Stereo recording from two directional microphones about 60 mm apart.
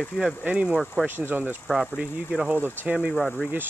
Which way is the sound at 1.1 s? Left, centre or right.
Right.